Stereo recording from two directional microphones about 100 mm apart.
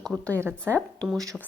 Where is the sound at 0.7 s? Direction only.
5° left (ahead or behind).